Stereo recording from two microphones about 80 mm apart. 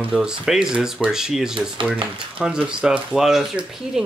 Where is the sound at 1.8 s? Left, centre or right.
Right.